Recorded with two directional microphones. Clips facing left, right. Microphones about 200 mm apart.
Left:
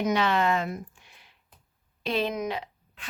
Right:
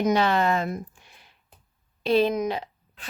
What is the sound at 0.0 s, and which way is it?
Speech, 40° right (ahead or behind).